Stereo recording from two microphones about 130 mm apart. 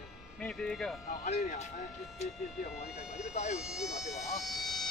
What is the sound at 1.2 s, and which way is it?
Speech, 70° left (ahead or behind).